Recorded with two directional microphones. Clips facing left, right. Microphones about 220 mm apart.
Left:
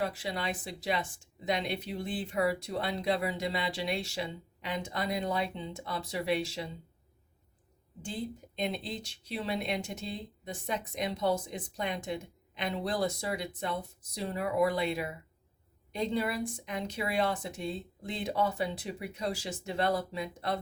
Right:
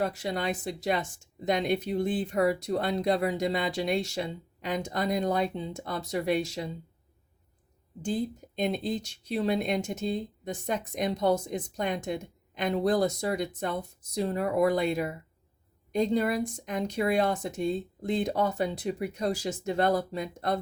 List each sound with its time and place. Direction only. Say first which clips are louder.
0.0 s speech: right 4 dB; 45° right (ahead or behind)
8.5 s speech: right 6 dB; 45° right (ahead or behind)